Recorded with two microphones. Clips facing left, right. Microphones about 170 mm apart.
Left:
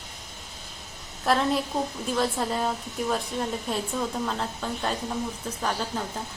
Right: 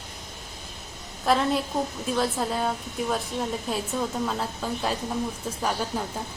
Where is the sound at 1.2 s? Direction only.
Centre (ahead or behind).